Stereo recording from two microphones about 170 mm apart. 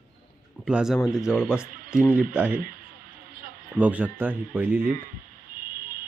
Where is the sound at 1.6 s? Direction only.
55° right (ahead or behind).